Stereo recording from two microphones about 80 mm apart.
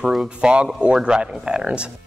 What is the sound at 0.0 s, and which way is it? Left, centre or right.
Speech, centre.